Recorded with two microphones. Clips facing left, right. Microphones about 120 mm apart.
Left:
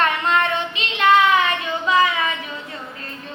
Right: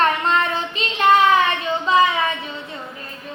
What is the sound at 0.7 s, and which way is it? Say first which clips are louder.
Child singing: right 1 dB; 35° right (ahead or behind).